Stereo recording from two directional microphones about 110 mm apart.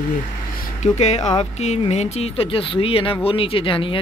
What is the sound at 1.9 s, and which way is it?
Speech, 75° left (ahead or behind).